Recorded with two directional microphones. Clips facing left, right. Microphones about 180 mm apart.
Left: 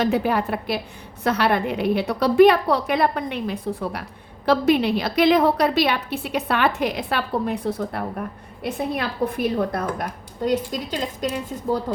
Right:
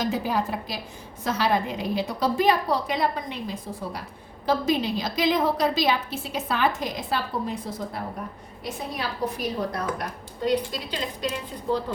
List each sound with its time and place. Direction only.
0.0 s a woman's voice: 65° left (ahead or behind); by 11.8 s 45° left (ahead or behind)